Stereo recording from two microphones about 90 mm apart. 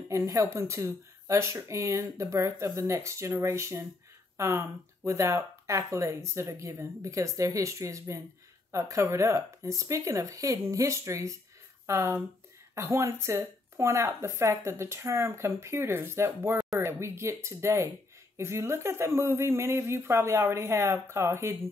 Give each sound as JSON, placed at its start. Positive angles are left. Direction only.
{"t": 0.1, "sound": "speech", "side_deg": -35}